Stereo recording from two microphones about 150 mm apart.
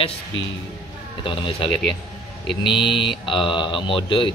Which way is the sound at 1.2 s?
35° left (ahead or behind).